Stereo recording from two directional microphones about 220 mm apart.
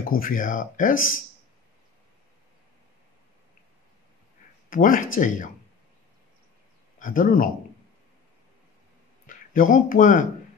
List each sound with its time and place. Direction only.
0.0 s speech: 40° left (ahead or behind)
4.6 s speech: 40° left (ahead or behind)
7.0 s speech: 40° left (ahead or behind)
9.5 s speech: 40° left (ahead or behind)